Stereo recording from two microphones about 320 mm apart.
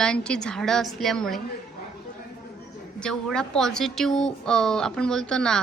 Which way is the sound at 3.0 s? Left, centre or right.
Centre.